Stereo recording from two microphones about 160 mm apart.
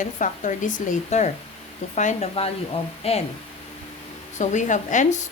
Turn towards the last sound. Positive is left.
turn(degrees=50)  # may be behind; listen again after turning